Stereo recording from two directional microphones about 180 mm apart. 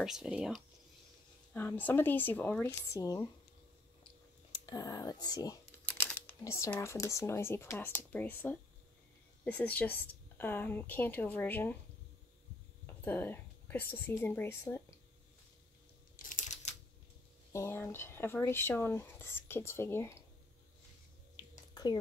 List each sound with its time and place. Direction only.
0.0 s speech: 5° right (ahead or behind)
1.5 s speech: 10° left (ahead or behind)
4.5 s speech: 20° left (ahead or behind)
5.9 s speech: 10° left (ahead or behind)
12.8 s speech: 10° left (ahead or behind)
16.2 s a sound: 45° left (ahead or behind)
17.5 s speech: 15° left (ahead or behind)
21.7 s speech: 20° left (ahead or behind)